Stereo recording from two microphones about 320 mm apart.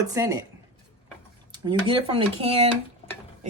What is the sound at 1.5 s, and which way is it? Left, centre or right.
Speech, centre.